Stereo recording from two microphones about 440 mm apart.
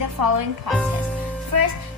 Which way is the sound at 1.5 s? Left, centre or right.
Right.